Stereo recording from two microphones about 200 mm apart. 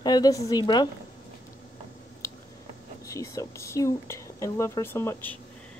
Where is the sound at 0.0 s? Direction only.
20° left (ahead or behind).